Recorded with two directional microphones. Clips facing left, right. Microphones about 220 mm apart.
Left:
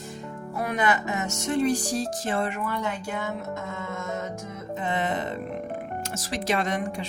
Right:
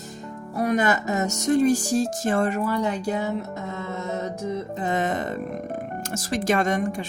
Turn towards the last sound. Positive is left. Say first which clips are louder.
# right 4 dB
turn(degrees=-45)  # may be behind; listen again after turning